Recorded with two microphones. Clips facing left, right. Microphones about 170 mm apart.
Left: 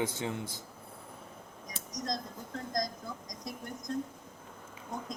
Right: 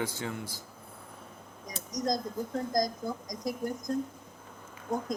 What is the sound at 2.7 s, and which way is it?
Speech, 40° right (ahead or behind).